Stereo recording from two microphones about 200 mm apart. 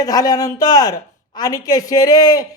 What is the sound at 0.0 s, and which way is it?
A woman's voice, 20° left (ahead or behind).